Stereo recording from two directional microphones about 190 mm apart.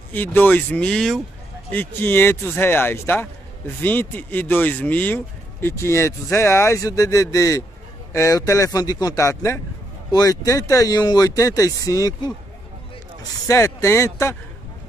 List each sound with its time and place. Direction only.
0.1 s speech: 10° left (ahead or behind)
13.5 s speech: 15° left (ahead or behind)